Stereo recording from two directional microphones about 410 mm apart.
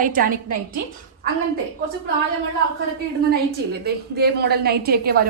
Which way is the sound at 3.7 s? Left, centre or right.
Right.